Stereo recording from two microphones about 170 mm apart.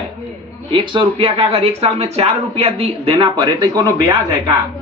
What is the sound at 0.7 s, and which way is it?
Speech, 30° right (ahead or behind).